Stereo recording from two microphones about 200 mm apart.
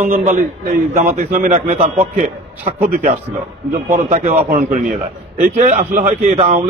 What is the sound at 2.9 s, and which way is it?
A man's voice, 45° right (ahead or behind).